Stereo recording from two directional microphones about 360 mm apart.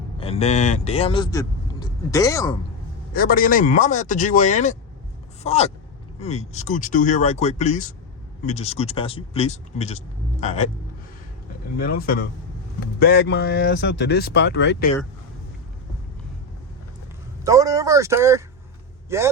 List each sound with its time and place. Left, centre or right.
0.2 s speech: centre
3.1 s speech: left
11.8 s speech: left
17.4 s speech: centre